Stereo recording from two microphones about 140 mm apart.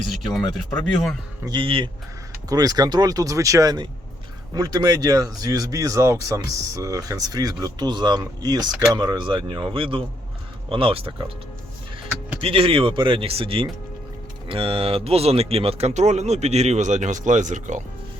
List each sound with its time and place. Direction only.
0.1 s speech: centre (ahead or behind)
1.5 s speech: 35° right (ahead or behind)
12.4 s speech: 40° right (ahead or behind); by 17.8 s 60° right (ahead or behind)